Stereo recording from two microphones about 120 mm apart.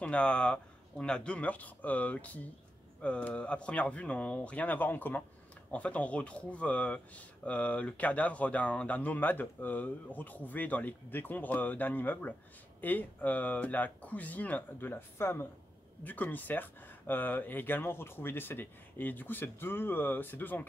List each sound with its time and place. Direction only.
0.0 s speech: 10° left (ahead or behind)